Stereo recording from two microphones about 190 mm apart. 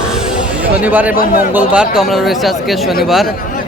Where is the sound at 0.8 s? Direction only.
10° right (ahead or behind).